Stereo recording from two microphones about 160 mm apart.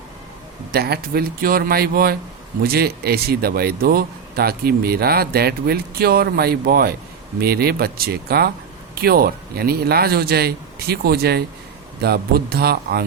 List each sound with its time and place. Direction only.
0.7 s a man's voice: 75° right (ahead or behind)